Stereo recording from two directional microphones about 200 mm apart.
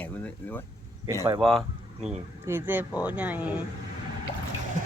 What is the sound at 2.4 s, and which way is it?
Speech, 10° right (ahead or behind).